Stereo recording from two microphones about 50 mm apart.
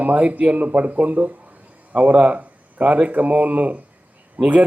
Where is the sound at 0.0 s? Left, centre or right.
Right.